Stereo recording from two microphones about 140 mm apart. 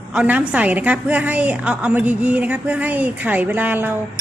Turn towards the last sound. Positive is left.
turn(degrees=-10)  # may be behind; listen again after turning